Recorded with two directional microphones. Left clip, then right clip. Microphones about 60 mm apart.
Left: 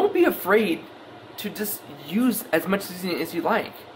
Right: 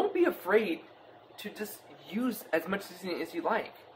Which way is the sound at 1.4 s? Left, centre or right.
Left.